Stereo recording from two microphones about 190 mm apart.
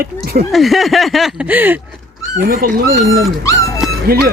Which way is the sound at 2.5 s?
50° right (ahead or behind).